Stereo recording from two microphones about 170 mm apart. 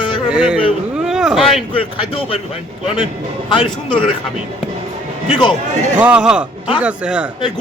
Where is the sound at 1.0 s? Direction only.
5° right (ahead or behind).